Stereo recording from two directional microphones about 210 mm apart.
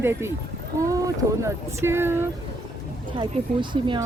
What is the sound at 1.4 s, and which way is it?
Speech, 10° right (ahead or behind).